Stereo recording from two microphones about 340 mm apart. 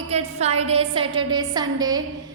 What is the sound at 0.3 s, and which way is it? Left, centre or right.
A woman's voice, centre.